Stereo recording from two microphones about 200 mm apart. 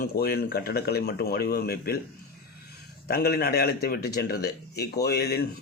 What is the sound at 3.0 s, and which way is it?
A man's voice, 50° left (ahead or behind).